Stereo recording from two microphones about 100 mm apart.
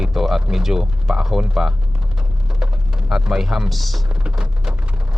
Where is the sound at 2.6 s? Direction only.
5° right (ahead or behind).